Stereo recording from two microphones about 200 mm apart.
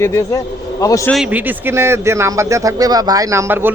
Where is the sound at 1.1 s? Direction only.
5° right (ahead or behind).